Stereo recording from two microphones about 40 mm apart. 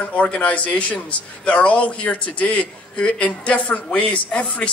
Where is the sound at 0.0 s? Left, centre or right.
Left.